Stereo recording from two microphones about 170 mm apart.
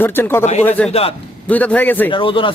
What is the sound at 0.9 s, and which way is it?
Speech, 35° left (ahead or behind).